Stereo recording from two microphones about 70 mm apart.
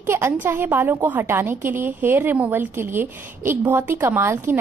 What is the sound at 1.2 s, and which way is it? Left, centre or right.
A woman's voice, right.